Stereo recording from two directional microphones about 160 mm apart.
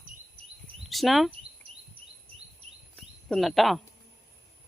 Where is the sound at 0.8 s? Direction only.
Centre (ahead or behind).